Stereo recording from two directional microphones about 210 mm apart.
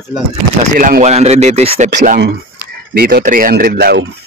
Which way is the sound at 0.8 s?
35° right (ahead or behind).